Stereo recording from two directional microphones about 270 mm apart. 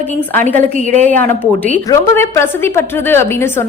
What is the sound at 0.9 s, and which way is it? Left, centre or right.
Speech, right.